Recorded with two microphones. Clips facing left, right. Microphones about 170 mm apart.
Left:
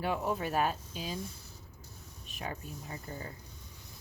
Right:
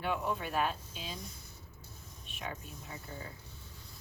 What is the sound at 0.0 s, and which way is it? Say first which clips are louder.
Speech: left 2 dB; 35° left (ahead or behind).